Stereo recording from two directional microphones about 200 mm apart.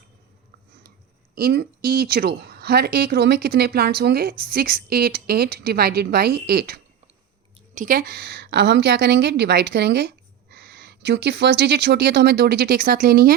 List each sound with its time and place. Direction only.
1.4 s speech: 50° right (ahead or behind)